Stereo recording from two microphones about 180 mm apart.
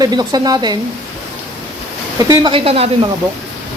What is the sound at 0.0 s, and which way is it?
Speech, 20° right (ahead or behind).